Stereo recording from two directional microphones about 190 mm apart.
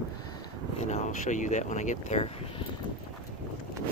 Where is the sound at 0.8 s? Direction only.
40° left (ahead or behind).